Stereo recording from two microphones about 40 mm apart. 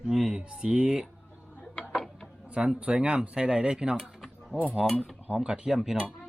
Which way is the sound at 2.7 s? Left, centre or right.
Right.